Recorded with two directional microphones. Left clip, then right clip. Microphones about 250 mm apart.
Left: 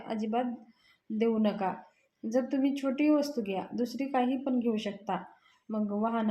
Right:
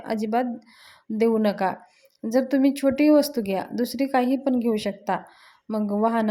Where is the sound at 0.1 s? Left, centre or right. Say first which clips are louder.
Right 8 dB; right.